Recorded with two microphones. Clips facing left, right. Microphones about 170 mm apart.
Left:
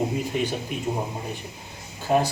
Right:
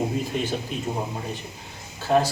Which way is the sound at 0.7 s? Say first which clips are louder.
Even; 15° left (ahead or behind).